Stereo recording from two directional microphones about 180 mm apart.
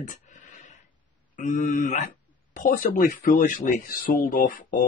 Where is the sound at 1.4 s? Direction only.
45° left (ahead or behind).